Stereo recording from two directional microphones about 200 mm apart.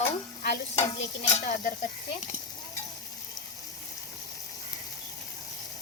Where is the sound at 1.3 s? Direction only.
40° left (ahead or behind).